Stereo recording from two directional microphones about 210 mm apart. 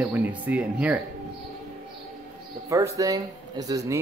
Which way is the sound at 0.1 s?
10° right (ahead or behind).